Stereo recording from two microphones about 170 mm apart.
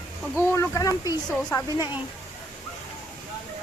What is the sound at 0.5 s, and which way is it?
Speech, 15° left (ahead or behind).